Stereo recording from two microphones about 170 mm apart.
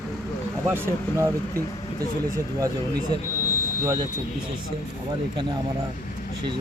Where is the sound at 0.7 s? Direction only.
15° right (ahead or behind).